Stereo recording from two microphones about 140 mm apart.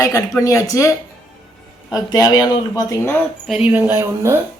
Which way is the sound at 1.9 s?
25° left (ahead or behind).